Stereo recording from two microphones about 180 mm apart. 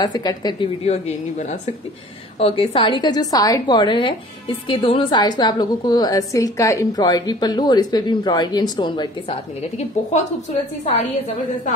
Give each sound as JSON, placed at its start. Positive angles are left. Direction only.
{"t": 0.0, "sound": "a woman's voice", "side_deg": 20}
{"t": 0.8, "sound": "a woman's voice", "side_deg": 35}